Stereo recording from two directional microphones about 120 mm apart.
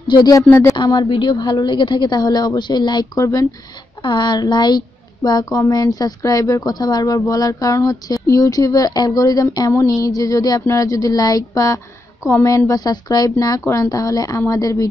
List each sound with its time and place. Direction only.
0.1 s a woman's voice: 30° left (ahead or behind)
0.5 s speech: 20° left (ahead or behind)
0.7 s a woman's voice: 40° left (ahead or behind)
4.0 s a woman's voice: 40° left (ahead or behind)